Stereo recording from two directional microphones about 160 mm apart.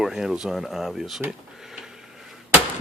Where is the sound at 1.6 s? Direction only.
5° right (ahead or behind).